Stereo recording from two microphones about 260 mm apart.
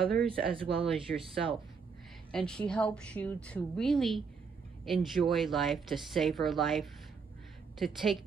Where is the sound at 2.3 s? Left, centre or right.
Centre.